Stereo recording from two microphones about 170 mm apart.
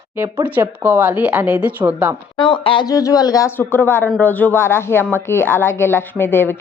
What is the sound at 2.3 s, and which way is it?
Speech, 30° left (ahead or behind).